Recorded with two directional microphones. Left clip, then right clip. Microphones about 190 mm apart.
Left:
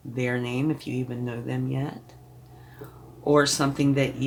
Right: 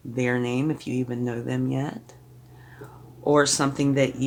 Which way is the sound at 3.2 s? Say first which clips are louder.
Right 1 dB; 40° right (ahead or behind).